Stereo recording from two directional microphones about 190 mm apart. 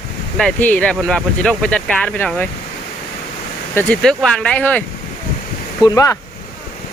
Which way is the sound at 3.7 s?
5° left (ahead or behind).